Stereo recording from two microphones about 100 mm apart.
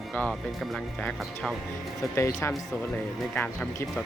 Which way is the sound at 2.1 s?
30° left (ahead or behind).